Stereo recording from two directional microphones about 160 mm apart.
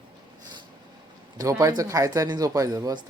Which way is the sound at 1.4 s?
20° right (ahead or behind).